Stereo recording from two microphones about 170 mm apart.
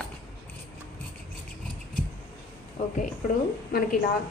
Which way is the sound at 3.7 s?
60° left (ahead or behind).